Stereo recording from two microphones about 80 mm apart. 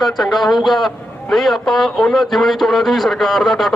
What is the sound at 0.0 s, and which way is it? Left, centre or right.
A man's voice, centre.